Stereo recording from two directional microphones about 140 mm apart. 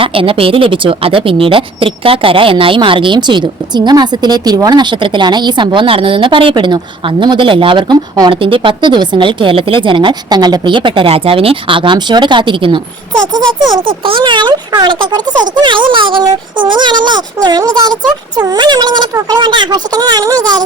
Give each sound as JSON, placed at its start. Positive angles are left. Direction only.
{"t": 0.0, "sound": "speech", "side_deg": -40}